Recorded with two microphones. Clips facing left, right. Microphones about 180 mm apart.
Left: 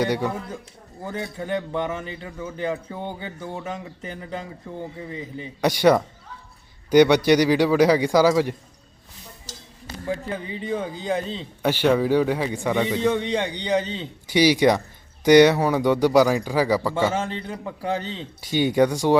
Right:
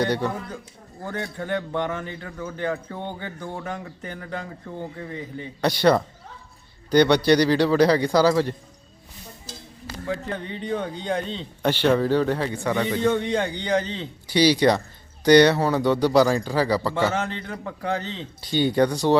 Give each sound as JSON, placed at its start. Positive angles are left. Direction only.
{"t": 0.0, "sound": "a man's voice", "side_deg": 10}
{"t": 1.4, "sound": "a man's voice", "side_deg": 10}
{"t": 10.2, "sound": "a man's voice", "side_deg": 5}
{"t": 12.7, "sound": "a man's voice", "side_deg": 5}
{"t": 14.3, "sound": "a man's voice", "side_deg": 15}
{"t": 17.2, "sound": "a man's voice", "side_deg": 30}
{"t": 18.3, "sound": "a man's voice", "side_deg": 10}